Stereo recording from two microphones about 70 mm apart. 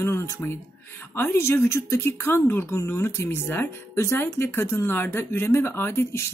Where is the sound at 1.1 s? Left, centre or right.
Left.